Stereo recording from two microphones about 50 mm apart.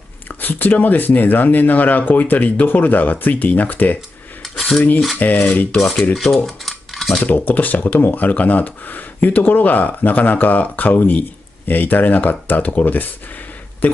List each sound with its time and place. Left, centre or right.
0.4 s speech: left
5.2 s speech: left
5.8 s speech: centre
6.1 s cutlery: centre
7.2 s speech: left